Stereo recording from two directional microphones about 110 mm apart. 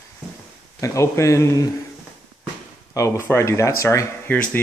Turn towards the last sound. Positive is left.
turn(degrees=15)  # may be behind; listen again after turning